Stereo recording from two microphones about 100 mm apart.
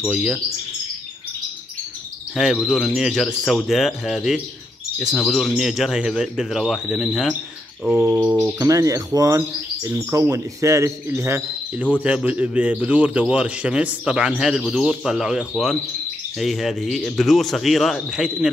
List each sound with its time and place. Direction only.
0.1 s a man's voice: 5° right (ahead or behind)
2.3 s a man's voice: 5° right (ahead or behind)
8.5 s speech: 35° right (ahead or behind)
12.0 s a man's voice: 10° right (ahead or behind)